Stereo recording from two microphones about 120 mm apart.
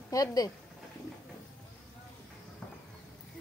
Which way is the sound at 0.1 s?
30° left (ahead or behind).